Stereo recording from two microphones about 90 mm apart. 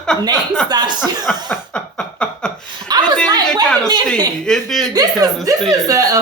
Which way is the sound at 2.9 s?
50° right (ahead or behind).